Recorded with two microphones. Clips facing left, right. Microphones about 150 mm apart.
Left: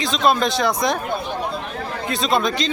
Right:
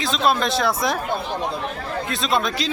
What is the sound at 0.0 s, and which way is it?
Speech, centre (ahead or behind).